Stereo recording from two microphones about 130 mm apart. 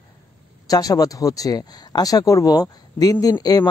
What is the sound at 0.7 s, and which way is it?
Speech, 30° left (ahead or behind).